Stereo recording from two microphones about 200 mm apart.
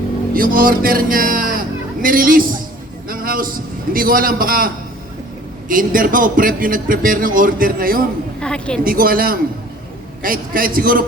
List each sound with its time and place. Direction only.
0.3 s a man's voice: 45° right (ahead or behind)
3.1 s a sound: 45° right (ahead or behind)
3.9 s a man's voice: 45° right (ahead or behind)
8.4 s a woman's voice: 5° left (ahead or behind)
8.8 s a man's voice: 45° right (ahead or behind)